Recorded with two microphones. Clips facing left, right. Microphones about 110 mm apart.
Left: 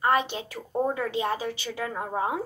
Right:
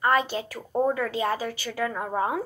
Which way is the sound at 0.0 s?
20° left (ahead or behind).